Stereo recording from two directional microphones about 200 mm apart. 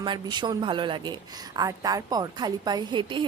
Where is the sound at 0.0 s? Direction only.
20° right (ahead or behind).